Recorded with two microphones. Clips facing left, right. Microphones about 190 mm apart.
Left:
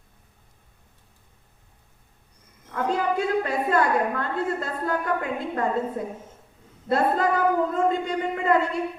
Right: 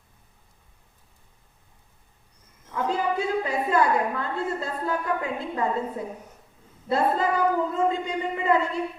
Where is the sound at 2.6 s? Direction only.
55° left (ahead or behind).